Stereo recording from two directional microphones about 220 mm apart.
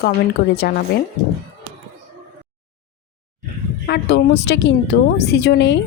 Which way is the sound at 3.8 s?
50° left (ahead or behind).